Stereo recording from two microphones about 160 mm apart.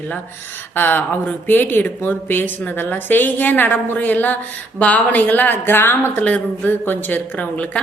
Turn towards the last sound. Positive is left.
turn(degrees=10)  # may be behind; listen again after turning